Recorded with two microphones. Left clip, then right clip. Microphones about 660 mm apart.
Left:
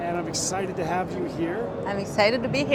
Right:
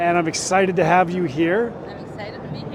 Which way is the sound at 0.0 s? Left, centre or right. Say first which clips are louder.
Right 8 dB; right.